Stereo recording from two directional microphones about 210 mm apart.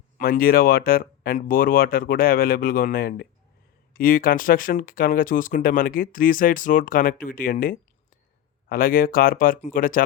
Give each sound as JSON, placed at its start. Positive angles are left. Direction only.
{"t": 0.2, "sound": "speech", "side_deg": 45}